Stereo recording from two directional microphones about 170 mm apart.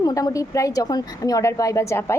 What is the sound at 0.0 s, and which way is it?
A woman's voice, 20° left (ahead or behind).